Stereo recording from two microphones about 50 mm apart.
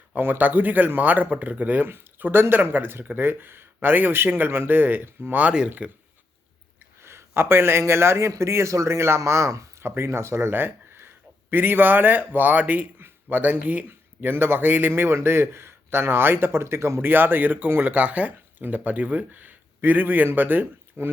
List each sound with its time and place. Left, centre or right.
0.1 s speech: right
1.9 s a man's voice: right
5.3 s speech: right
7.0 s a man's voice: right
10.0 s speech: right
10.5 s a sound: right
11.5 s speech: right
13.8 s a man's voice: right
17.1 s speech: right